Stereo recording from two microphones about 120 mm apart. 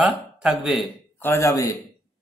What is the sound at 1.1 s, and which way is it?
Speech, 20° left (ahead or behind).